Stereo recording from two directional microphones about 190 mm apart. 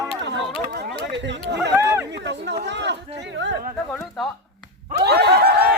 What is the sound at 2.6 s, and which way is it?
Chatter, 65° right (ahead or behind).